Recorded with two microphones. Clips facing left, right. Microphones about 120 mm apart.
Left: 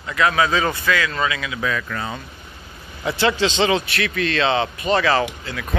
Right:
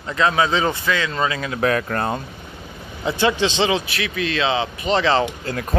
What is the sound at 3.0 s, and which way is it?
A man's voice, 15° right (ahead or behind).